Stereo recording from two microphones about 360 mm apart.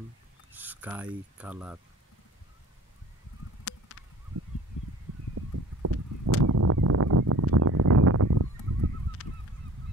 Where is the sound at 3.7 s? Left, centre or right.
Left.